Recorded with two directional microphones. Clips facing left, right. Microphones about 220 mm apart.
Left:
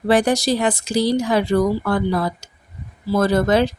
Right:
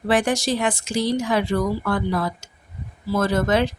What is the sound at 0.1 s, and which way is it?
A woman's voice, 35° left (ahead or behind).